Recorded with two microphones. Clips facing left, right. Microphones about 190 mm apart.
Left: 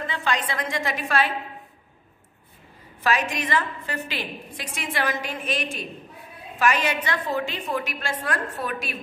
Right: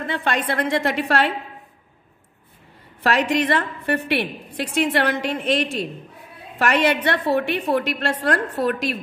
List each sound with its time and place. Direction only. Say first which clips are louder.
0.0 s a woman's voice: right 3 dB; 55° right (ahead or behind)
3.0 s a woman's voice: right 5 dB; 65° right (ahead or behind)